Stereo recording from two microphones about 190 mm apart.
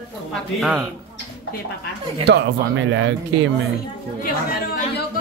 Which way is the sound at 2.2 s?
70° right (ahead or behind).